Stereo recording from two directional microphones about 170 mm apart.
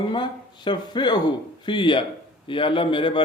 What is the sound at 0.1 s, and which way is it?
Speech, 25° left (ahead or behind).